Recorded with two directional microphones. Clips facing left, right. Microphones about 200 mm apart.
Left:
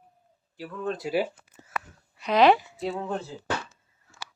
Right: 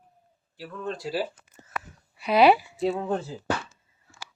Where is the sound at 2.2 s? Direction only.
10° right (ahead or behind).